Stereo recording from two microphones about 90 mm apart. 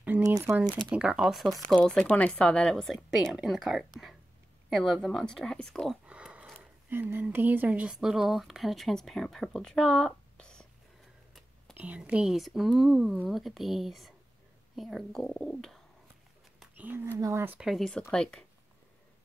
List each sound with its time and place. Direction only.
0.2 s speech: 35° right (ahead or behind)
0.9 s speech: 10° right (ahead or behind)
1.9 s speech: 10° left (ahead or behind)
6.0 s a sound: 15° right (ahead or behind)
6.9 s speech: 25° right (ahead or behind); by 10.7 s 10° left (ahead or behind)
11.7 s speech: 15° right (ahead or behind); by 15.8 s 5° left (ahead or behind)
16.7 s a sound: 20° right (ahead or behind)
17.2 s speech: 35° right (ahead or behind)
17.6 s speech: centre (ahead or behind)